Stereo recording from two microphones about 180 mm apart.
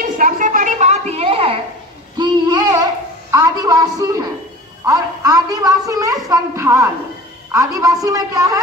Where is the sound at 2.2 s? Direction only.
20° right (ahead or behind).